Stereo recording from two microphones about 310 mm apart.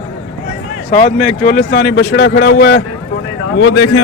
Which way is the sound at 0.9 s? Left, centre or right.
Left.